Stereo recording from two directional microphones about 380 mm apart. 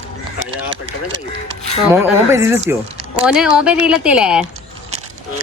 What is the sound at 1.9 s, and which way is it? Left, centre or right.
A woman's voice, centre.